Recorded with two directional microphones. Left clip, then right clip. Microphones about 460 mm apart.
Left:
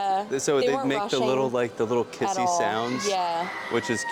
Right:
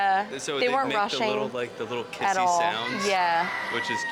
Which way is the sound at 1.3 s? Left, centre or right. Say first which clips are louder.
Left 5 dB; left.